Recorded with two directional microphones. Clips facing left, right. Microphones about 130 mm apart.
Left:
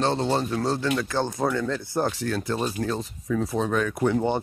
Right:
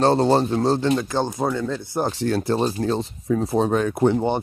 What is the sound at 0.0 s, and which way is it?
Speech, 40° right (ahead or behind).